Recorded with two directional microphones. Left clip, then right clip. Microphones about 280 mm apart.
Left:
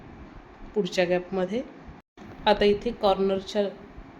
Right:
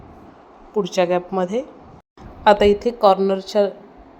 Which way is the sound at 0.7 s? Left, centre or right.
Centre.